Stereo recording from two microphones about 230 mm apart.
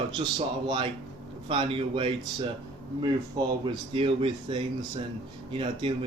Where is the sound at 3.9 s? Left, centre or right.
Right.